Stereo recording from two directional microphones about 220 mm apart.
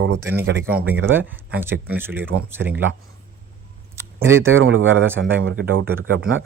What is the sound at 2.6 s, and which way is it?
Speech, 55° right (ahead or behind).